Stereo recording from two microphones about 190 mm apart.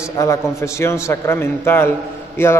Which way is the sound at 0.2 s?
15° left (ahead or behind).